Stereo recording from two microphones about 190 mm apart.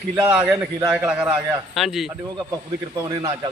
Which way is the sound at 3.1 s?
25° right (ahead or behind).